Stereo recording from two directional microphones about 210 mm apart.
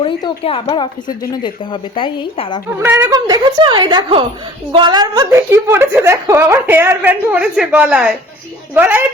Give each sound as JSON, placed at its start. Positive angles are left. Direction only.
{"t": 0.0, "sound": "a woman's voice", "side_deg": 25}
{"t": 2.8, "sound": "a woman's voice", "side_deg": -15}